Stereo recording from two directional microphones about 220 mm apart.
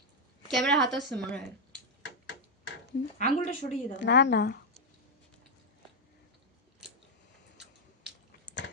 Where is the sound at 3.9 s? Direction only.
50° left (ahead or behind).